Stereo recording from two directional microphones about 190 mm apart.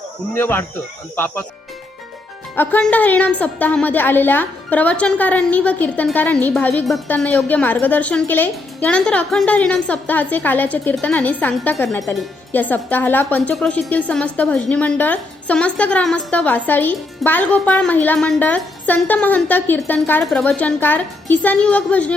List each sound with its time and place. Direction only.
0.3 s a woman's voice: 10° left (ahead or behind)
2.6 s a woman's voice: 10° left (ahead or behind)